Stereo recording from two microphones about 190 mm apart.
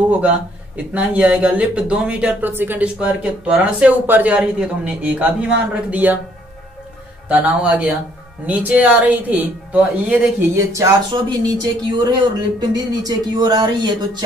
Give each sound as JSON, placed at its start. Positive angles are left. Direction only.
{"t": 0.1, "sound": "speech", "side_deg": -5}
{"t": 7.2, "sound": "speech", "side_deg": -5}